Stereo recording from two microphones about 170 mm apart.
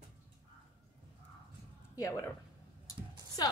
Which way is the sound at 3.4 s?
25° left (ahead or behind).